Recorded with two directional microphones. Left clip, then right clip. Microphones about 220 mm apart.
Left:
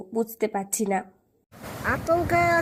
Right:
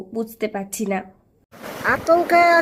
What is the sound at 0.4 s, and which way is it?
Speech, 20° left (ahead or behind).